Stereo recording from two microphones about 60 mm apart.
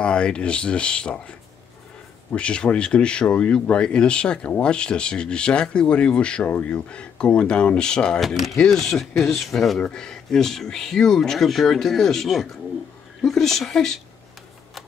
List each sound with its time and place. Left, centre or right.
0.0 s speech: centre
2.3 s speech: centre
8.2 s speech: centre